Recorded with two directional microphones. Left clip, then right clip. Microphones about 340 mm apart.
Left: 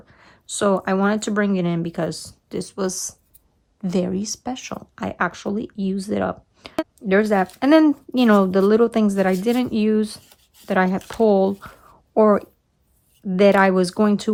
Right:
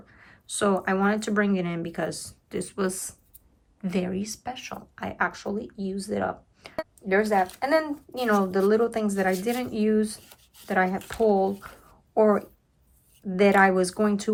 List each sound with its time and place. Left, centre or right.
0.1 s speech: centre
10.2 s a sound: centre
10.7 s speech: centre